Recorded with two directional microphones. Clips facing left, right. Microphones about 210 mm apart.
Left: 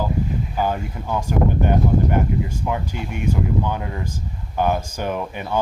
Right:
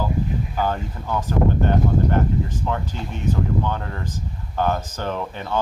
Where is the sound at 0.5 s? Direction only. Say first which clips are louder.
Left 2 dB; 15° left (ahead or behind).